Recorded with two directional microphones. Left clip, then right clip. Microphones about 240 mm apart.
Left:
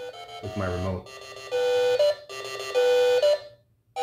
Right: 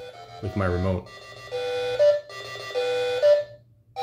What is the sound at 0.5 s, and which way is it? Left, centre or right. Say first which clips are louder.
Speech: right 4 dB; right.